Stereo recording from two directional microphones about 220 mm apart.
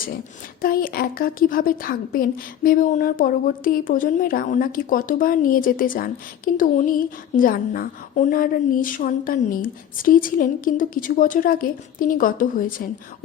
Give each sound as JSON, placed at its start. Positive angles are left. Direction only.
{"t": 0.6, "sound": "a woman's voice", "side_deg": 40}